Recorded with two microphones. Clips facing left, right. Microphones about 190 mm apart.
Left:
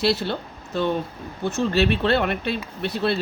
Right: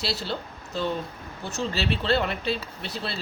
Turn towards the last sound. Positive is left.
turn(degrees=60)  # may be behind; listen again after turning